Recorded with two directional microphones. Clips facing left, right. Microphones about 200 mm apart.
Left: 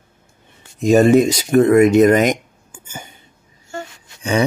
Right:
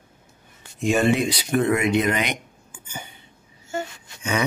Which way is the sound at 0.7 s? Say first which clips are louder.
Left 9 dB; 40° left (ahead or behind).